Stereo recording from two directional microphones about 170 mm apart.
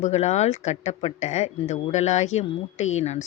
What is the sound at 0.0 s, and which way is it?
Speech, 40° left (ahead or behind).